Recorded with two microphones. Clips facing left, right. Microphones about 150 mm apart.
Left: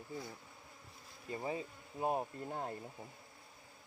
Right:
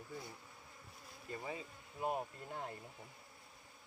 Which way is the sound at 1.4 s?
30° left (ahead or behind).